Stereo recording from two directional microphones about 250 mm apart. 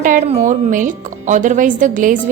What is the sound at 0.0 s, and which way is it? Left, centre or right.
A woman's voice, right.